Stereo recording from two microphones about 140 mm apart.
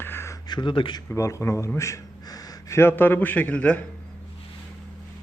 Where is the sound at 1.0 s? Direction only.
20° left (ahead or behind).